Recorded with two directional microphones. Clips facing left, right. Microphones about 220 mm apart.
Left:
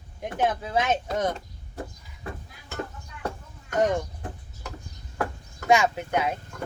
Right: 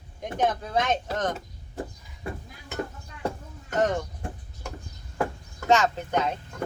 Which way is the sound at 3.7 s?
10° left (ahead or behind).